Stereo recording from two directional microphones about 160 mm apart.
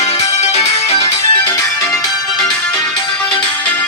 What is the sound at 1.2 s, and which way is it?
Music, 20° left (ahead or behind).